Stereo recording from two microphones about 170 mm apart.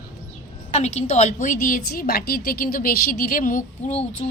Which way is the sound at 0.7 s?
45° left (ahead or behind).